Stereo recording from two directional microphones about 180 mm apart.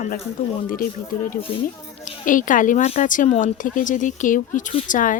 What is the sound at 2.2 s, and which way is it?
Speech, 45° left (ahead or behind).